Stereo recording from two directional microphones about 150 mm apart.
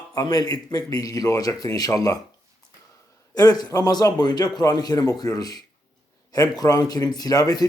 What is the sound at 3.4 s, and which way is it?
Speech, 25° left (ahead or behind).